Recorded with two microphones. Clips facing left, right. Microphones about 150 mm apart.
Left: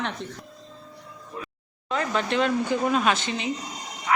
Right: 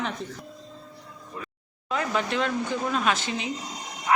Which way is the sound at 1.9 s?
5° right (ahead or behind).